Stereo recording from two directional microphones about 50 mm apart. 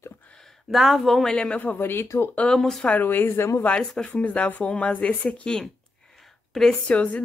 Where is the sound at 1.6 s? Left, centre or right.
Left.